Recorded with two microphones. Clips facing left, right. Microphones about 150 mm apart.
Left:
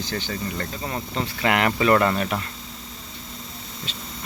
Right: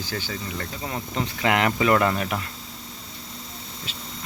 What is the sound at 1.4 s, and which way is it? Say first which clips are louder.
Speech: left 1 dB; 15° right (ahead or behind).